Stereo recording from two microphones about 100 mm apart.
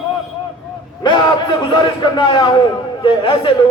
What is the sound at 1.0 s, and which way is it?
A man's voice, 50° left (ahead or behind).